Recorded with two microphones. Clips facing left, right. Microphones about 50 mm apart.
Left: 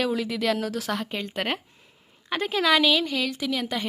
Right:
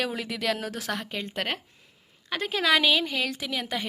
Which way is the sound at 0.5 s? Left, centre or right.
Centre.